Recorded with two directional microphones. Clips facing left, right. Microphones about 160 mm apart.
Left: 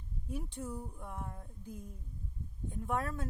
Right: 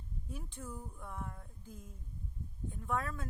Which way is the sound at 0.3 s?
20° left (ahead or behind).